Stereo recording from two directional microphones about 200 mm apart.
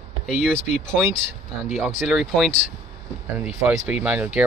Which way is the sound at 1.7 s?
Centre (ahead or behind).